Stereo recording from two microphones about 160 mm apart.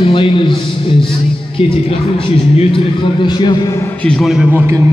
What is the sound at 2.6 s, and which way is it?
A man's voice, 35° left (ahead or behind).